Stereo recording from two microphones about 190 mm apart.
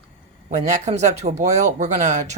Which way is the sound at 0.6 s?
35° right (ahead or behind).